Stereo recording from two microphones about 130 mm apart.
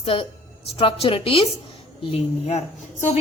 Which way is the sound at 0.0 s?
45° left (ahead or behind).